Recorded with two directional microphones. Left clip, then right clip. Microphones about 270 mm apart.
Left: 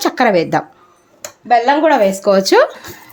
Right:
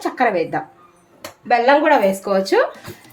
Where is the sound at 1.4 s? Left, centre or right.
Left.